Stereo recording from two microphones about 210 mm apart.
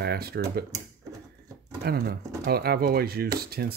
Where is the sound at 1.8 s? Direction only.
45° right (ahead or behind).